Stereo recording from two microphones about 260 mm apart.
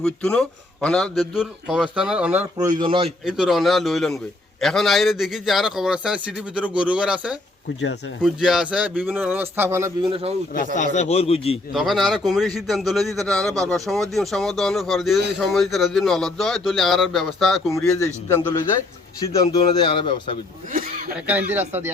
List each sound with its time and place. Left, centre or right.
0.0 s a man's voice: centre
3.2 s a man's voice: centre; by 10.3 s right
10.8 s a man's voice: left
11.7 s a man's voice: centre
19.2 s speech: centre
20.7 s a sound: right
21.2 s a man's voice: centre